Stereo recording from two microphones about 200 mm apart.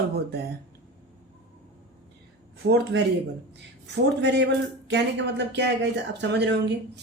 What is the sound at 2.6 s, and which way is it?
Speech, 55° right (ahead or behind).